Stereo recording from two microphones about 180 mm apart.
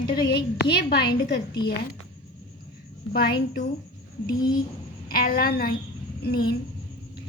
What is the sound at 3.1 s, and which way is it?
Speech, 60° left (ahead or behind).